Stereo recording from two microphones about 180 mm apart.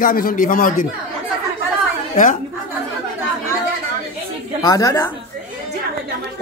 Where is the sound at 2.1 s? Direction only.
45° left (ahead or behind).